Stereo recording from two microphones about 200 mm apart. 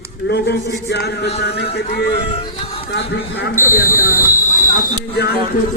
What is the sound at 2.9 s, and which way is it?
Speech, 55° left (ahead or behind).